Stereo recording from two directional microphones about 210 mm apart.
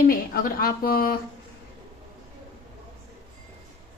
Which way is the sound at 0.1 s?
45° left (ahead or behind).